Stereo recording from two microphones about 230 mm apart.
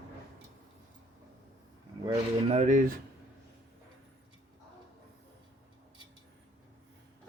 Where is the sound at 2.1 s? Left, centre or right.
Right.